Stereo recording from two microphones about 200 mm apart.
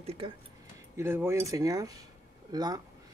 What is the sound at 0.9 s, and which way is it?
Speech, 10° right (ahead or behind).